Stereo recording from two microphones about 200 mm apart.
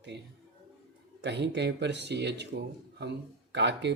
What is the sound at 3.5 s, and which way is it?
Speech, 60° right (ahead or behind).